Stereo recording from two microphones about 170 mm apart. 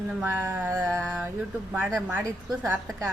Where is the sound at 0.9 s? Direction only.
5° left (ahead or behind).